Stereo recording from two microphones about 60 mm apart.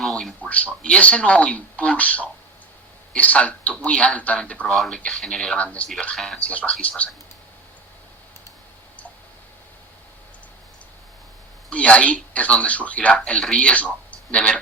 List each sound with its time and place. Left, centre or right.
0.0 s a sound: centre
0.4 s speech: left
5.5 s speech: left
6.1 s speech: centre
6.4 s speech: left
11.7 s speech: left